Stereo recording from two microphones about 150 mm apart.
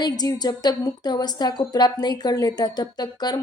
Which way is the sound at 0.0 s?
25° left (ahead or behind).